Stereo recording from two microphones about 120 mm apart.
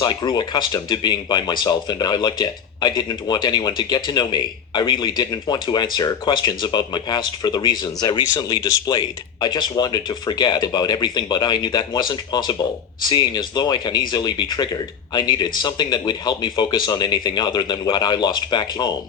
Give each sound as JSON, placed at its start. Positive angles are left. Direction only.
{"t": 0.0, "sound": "speech", "side_deg": 35}